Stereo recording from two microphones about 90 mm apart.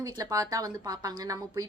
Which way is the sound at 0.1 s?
40° right (ahead or behind).